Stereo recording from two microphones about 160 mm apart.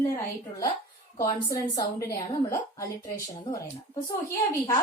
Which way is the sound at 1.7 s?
20° left (ahead or behind).